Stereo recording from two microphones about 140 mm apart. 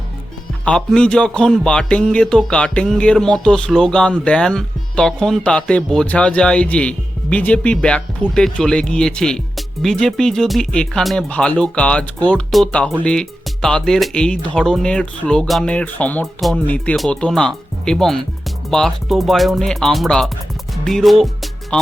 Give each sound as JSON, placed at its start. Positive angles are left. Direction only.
{"t": 0.6, "sound": "speech", "side_deg": 5}
{"t": 16.2, "sound": "speech", "side_deg": 0}
{"t": 20.8, "sound": "music", "side_deg": 0}